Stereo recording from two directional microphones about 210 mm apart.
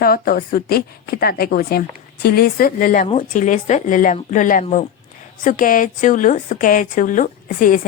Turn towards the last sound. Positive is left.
turn(degrees=40)  # may be behind; listen again after turning